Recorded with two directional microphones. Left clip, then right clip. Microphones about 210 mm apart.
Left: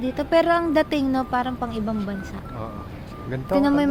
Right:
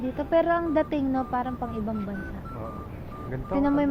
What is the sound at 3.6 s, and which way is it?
Speech, 15° left (ahead or behind).